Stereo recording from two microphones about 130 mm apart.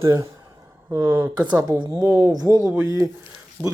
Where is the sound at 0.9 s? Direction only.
20° right (ahead or behind).